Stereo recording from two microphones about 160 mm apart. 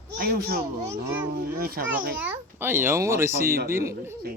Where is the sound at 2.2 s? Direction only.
10° right (ahead or behind).